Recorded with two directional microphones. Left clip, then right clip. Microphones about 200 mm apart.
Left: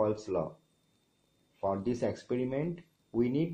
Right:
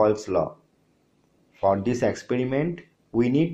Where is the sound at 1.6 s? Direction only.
25° right (ahead or behind).